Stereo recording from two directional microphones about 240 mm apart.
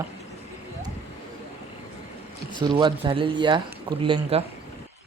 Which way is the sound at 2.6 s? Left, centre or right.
Centre.